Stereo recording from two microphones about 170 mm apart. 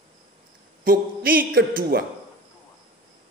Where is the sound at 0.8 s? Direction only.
60° right (ahead or behind).